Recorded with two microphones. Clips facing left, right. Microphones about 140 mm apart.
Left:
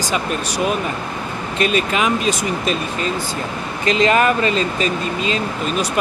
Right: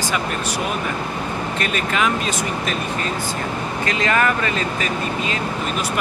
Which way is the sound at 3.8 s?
20° left (ahead or behind).